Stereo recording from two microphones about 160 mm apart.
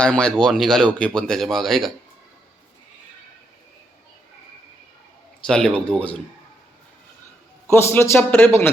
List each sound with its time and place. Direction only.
0.0 s speech: 5° left (ahead or behind)
5.5 s speech: 5° left (ahead or behind)
7.7 s a man's voice: 15° left (ahead or behind)